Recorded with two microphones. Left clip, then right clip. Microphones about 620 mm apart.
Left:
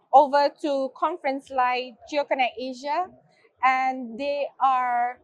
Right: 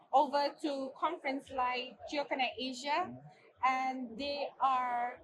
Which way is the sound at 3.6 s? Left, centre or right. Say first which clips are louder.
Left 11 dB; left.